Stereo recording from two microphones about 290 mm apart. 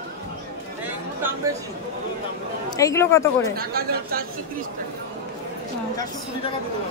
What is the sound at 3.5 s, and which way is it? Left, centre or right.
Speech, right.